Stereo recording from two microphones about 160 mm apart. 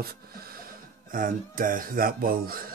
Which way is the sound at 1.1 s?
60° right (ahead or behind).